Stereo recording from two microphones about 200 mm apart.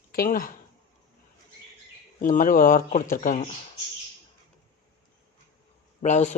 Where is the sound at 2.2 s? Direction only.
40° left (ahead or behind).